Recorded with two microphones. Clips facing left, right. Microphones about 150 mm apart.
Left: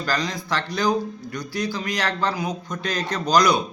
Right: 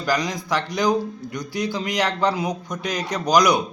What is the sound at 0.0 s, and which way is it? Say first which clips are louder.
Speech: right 2 dB; 15° right (ahead or behind).